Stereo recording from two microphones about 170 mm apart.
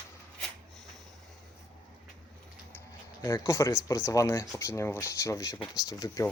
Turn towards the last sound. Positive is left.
turn(degrees=20)  # may be behind; listen again after turning